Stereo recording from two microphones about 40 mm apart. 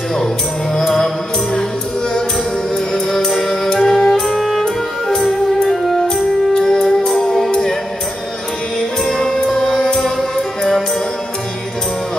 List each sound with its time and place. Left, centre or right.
0.7 s music: centre
2.9 s music: centre
6.5 s music: centre
7.2 s music: centre
9.0 s music: centre